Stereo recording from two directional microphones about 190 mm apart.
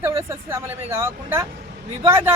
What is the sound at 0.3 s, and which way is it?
Speech, 15° right (ahead or behind).